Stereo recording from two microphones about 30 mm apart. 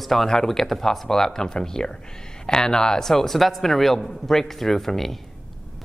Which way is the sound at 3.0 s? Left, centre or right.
Centre.